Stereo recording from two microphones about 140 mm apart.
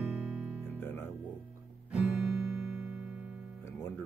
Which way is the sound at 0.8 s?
15° left (ahead or behind).